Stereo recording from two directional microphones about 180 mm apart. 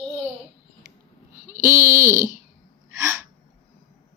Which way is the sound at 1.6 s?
15° right (ahead or behind).